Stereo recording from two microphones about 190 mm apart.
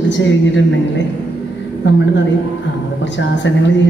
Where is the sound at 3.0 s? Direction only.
75° left (ahead or behind).